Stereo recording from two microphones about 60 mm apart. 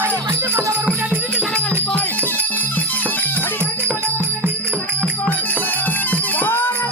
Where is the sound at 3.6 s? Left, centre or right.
Right.